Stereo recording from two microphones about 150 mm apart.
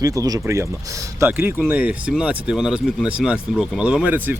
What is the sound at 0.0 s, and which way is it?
Speech, 25° right (ahead or behind).